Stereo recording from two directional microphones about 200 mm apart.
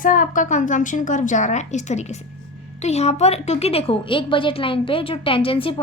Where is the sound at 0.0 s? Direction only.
40° left (ahead or behind).